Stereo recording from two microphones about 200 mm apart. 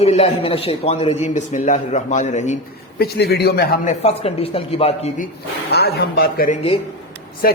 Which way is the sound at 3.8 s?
30° left (ahead or behind).